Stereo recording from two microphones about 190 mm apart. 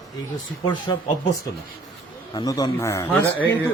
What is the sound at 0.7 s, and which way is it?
Speech, 25° left (ahead or behind).